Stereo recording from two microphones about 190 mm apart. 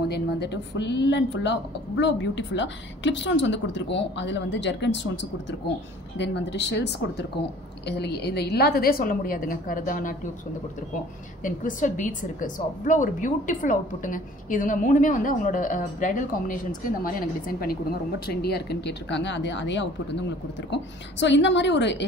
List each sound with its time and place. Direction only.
0.1 s a woman's voice: 65° left (ahead or behind); by 10.1 s 45° left (ahead or behind)
11.4 s a woman's voice: 40° left (ahead or behind); by 22.0 s 70° left (ahead or behind)